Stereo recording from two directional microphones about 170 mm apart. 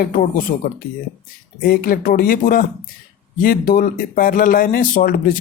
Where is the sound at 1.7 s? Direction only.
55° left (ahead or behind).